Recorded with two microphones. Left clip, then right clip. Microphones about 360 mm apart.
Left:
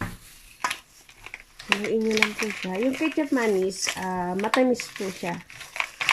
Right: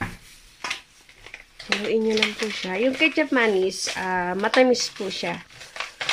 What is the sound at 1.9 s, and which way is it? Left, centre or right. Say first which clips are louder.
Speech: right 3 dB; right.